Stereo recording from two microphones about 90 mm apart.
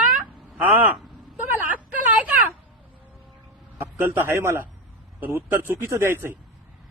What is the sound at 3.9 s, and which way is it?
A man's voice, 25° right (ahead or behind).